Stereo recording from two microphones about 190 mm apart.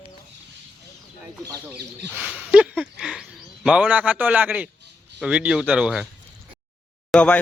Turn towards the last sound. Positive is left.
turn(degrees=5)  # may be behind; listen again after turning